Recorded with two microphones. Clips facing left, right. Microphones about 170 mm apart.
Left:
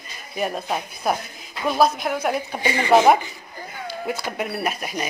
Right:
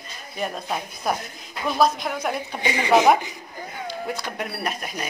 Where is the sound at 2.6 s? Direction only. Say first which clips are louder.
Left 2 dB; 20° right (ahead or behind).